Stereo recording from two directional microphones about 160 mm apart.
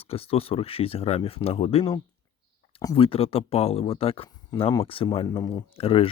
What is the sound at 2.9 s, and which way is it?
Speech, 35° left (ahead or behind).